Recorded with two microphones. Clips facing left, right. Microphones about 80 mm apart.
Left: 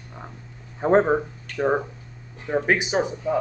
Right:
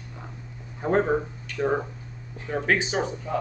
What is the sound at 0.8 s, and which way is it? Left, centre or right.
Speech, left.